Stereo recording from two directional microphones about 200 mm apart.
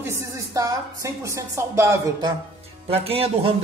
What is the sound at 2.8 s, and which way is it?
Speech, 30° right (ahead or behind).